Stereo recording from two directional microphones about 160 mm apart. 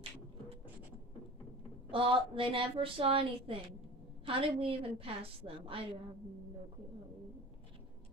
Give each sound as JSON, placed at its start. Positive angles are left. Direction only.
{"t": 1.9, "sound": "a woman's voice", "side_deg": -35}